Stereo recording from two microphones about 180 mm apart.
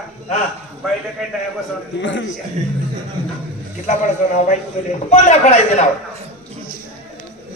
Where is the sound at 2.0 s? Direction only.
90° left.